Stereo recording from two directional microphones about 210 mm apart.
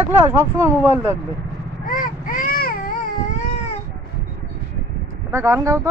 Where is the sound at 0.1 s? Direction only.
10° right (ahead or behind).